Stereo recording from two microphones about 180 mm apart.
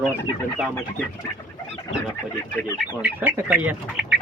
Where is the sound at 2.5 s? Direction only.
20° left (ahead or behind).